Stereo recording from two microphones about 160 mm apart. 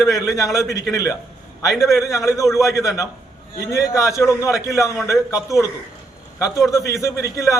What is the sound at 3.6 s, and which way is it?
A man's voice, 20° left (ahead or behind).